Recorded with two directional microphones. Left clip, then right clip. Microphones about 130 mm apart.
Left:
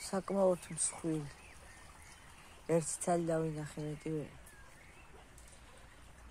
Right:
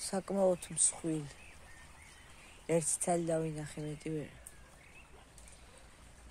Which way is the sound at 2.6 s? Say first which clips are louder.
Right 1 dB; 20° right (ahead or behind).